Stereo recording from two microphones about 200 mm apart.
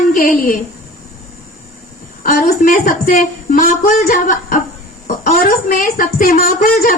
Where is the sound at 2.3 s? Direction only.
40° left (ahead or behind).